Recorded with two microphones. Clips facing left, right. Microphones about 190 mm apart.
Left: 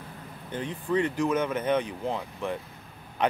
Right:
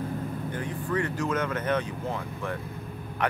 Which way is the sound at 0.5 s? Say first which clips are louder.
Left 5 dB; 20° left (ahead or behind).